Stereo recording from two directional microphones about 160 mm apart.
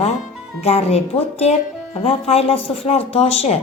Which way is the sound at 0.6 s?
40° left (ahead or behind).